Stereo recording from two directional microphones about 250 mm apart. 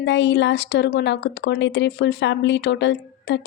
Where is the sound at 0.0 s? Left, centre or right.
Left.